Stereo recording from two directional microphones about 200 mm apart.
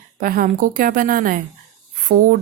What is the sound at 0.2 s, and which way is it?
Speech, 45° right (ahead or behind).